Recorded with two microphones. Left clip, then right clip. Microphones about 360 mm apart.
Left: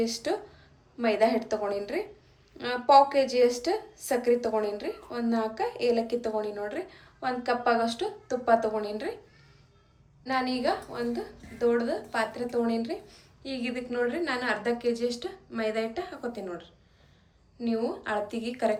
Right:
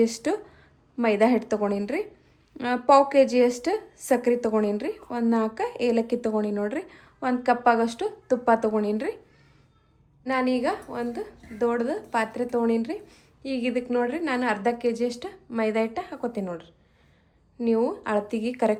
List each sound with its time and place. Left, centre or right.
0.0 s a woman's voice: centre
10.2 s a woman's voice: centre